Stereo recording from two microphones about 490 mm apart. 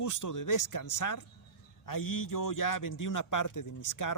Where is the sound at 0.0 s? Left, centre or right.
Left.